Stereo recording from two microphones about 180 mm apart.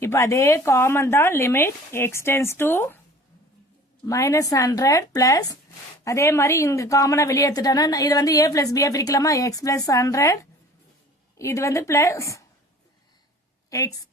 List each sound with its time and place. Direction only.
0.0 s speech: 15° left (ahead or behind)
4.0 s a woman's voice: 20° left (ahead or behind)
11.3 s speech: 15° left (ahead or behind)
13.7 s a woman's voice: 20° left (ahead or behind)